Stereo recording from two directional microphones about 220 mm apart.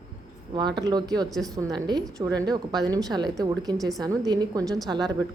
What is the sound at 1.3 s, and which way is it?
Speech, centre (ahead or behind).